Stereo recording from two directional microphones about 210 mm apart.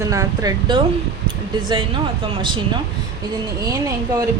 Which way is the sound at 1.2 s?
25° right (ahead or behind).